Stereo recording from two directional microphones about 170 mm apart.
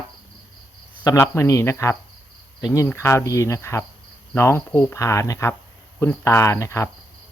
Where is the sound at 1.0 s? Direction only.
20° left (ahead or behind).